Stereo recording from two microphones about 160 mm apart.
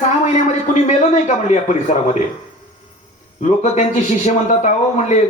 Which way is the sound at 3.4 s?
50° left (ahead or behind).